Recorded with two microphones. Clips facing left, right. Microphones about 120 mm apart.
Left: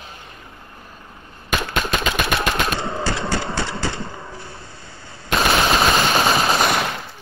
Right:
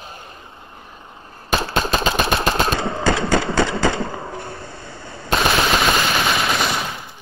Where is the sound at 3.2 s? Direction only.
Centre (ahead or behind).